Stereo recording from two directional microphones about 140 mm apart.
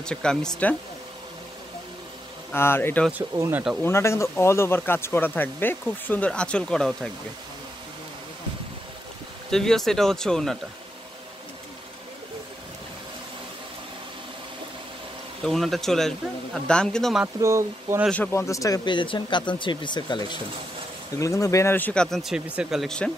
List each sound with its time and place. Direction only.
0.0 s a man's voice: 5° left (ahead or behind)
2.5 s speech: 15° left (ahead or behind)
3.1 s speech: 15° right (ahead or behind)
3.8 s speech: 20° left (ahead or behind)
9.5 s a man's voice: 5° left (ahead or behind)
15.4 s a man's voice: centre (ahead or behind)
17.4 s speech: 20° right (ahead or behind)
18.1 s speech: 15° left (ahead or behind)